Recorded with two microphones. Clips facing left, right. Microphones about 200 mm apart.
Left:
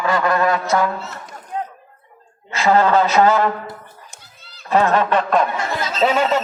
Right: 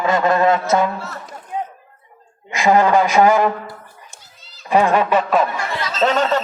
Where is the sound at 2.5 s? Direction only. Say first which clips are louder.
Right 1 dB; 15° right (ahead or behind).